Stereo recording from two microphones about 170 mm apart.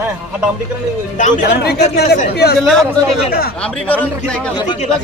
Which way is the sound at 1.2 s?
45° left (ahead or behind).